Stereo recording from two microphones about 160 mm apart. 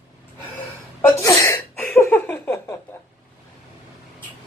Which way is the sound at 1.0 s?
20° left (ahead or behind).